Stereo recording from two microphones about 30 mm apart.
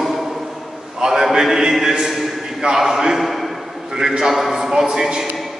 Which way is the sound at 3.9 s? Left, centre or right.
Centre.